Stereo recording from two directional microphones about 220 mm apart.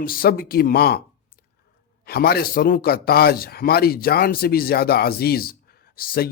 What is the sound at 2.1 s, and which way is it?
A man's voice, 45° left (ahead or behind).